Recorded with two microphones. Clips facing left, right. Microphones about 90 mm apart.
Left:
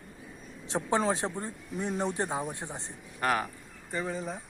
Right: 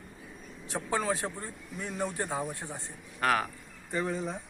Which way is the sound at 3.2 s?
5° left (ahead or behind).